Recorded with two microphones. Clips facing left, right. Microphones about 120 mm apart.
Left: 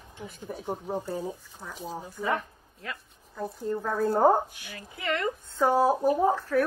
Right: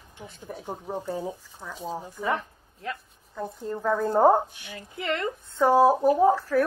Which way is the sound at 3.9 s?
15° right (ahead or behind).